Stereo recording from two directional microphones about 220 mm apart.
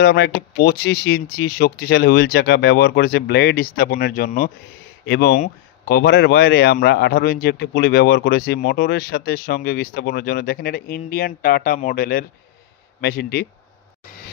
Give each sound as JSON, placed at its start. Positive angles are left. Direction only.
{"t": 0.0, "sound": "a man's voice", "side_deg": 50}